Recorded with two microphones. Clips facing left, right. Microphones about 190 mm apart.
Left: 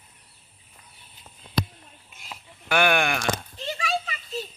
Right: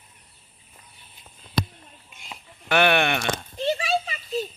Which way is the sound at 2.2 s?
5° left (ahead or behind).